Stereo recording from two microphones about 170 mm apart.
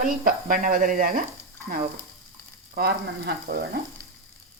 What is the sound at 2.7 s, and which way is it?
Speech, 65° right (ahead or behind).